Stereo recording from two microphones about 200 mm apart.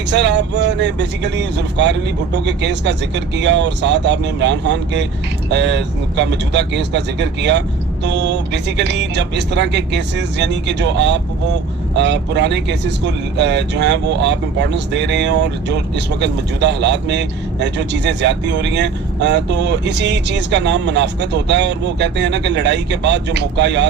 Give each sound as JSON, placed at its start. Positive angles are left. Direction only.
{"t": 0.1, "sound": "speech", "side_deg": -60}